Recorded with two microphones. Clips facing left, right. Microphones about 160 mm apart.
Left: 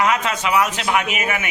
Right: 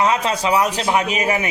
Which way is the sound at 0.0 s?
30° right (ahead or behind).